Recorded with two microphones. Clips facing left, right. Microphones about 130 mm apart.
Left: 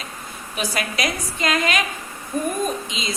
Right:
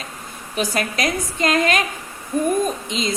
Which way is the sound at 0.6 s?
45° right (ahead or behind).